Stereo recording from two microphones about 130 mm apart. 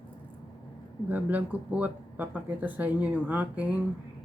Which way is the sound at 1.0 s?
10° right (ahead or behind).